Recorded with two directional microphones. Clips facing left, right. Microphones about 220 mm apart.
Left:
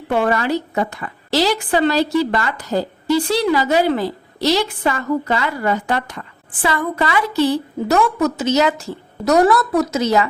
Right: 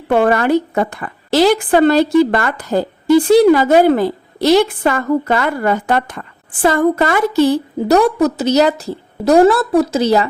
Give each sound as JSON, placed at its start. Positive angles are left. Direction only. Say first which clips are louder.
{"t": 0.1, "sound": "a woman's voice", "louder": "right 5 dB", "side_deg": -50}